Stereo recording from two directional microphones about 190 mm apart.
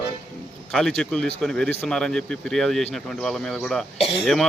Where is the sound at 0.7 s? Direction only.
5° left (ahead or behind).